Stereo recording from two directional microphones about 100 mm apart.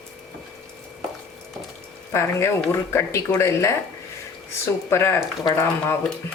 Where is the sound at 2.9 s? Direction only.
25° left (ahead or behind).